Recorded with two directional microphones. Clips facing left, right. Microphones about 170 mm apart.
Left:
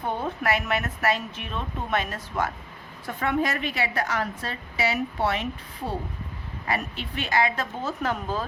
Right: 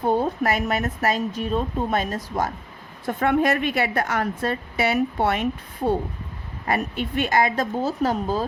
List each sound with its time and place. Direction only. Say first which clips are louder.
0.0 s a woman's voice: right 7 dB; 40° right (ahead or behind)
3.1 s a woman's voice: right 6 dB; 50° right (ahead or behind)